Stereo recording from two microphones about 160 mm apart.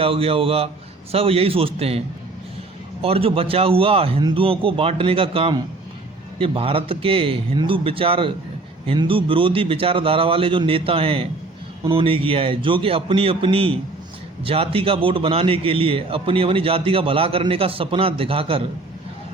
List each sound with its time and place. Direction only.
0.0 s a man's voice: 35° right (ahead or behind)
3.0 s a man's voice: 35° right (ahead or behind)